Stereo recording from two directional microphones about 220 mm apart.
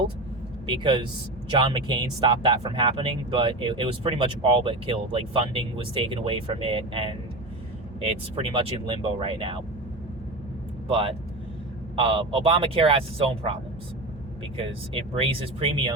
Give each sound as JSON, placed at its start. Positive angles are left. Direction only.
{"t": 0.7, "sound": "speech", "side_deg": -20}
{"t": 10.8, "sound": "speech", "side_deg": -25}